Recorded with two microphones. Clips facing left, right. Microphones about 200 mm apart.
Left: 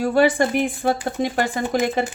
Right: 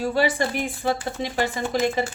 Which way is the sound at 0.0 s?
50° left (ahead or behind).